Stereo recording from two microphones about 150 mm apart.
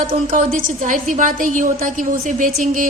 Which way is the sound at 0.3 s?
60° right (ahead or behind).